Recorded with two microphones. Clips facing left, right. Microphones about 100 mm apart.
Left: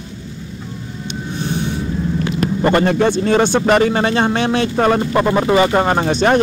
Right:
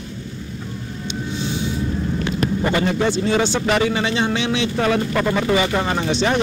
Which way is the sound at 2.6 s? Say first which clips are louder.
Left 7 dB; 55° left (ahead or behind).